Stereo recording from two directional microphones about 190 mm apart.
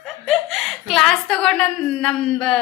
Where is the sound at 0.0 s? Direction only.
Centre (ahead or behind).